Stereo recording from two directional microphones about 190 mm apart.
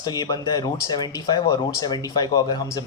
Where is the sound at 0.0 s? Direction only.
20° left (ahead or behind).